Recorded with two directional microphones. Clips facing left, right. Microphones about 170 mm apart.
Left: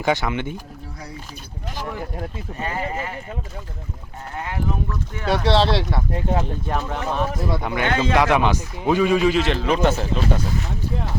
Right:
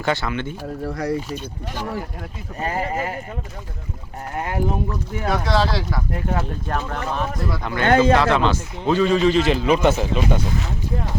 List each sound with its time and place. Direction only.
0.0 s speech: 15° left (ahead or behind)
0.9 s speech: 85° right
2.6 s speech: 40° right (ahead or behind)
4.4 s speech: 35° right (ahead or behind)
5.5 s speech: 25° left (ahead or behind)
7.9 s speech: 45° right (ahead or behind)
8.1 s speech: 15° left (ahead or behind)
9.5 s speech: 5° right (ahead or behind)